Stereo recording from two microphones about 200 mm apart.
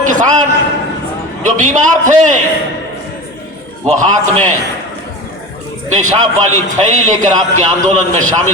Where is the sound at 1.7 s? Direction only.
40° right (ahead or behind).